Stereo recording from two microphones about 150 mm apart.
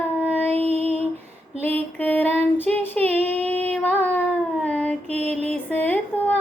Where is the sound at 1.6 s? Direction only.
10° left (ahead or behind).